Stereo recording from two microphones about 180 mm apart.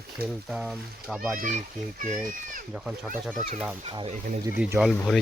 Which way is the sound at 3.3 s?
40° right (ahead or behind).